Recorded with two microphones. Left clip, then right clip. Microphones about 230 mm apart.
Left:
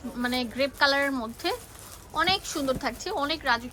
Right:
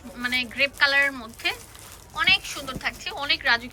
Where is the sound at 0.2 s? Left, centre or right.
Centre.